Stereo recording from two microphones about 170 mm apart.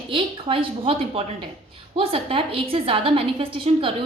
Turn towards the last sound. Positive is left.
turn(degrees=-30)  # may be behind; listen again after turning